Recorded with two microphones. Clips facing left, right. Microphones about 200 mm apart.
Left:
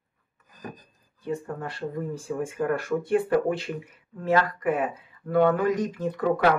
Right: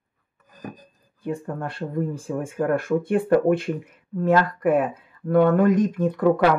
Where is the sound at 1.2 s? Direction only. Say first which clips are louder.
Right 2 dB; 55° right (ahead or behind).